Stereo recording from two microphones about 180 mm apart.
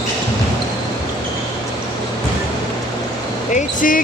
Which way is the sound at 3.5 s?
50° left (ahead or behind).